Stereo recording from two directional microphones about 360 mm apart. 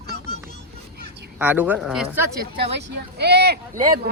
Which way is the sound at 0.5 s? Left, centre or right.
Right.